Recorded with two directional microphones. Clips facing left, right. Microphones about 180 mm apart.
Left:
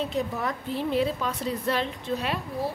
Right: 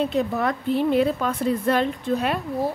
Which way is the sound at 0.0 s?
65° right (ahead or behind).